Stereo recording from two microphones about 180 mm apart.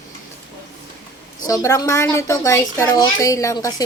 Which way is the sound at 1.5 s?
20° left (ahead or behind).